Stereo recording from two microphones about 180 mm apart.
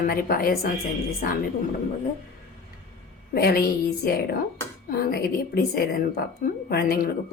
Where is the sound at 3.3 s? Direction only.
60° left (ahead or behind).